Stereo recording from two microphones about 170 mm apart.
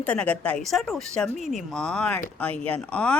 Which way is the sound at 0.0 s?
10° left (ahead or behind).